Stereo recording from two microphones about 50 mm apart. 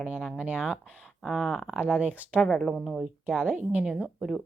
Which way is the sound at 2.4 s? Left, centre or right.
Centre.